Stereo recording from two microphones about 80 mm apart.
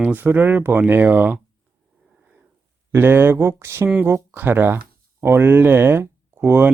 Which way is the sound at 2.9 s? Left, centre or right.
Right.